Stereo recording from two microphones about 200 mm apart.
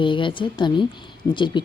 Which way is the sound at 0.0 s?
25° left (ahead or behind).